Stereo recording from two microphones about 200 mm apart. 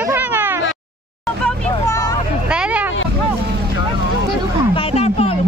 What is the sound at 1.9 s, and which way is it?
Hubbub, 15° left (ahead or behind).